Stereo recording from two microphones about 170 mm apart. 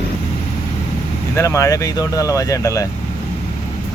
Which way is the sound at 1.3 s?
20° left (ahead or behind).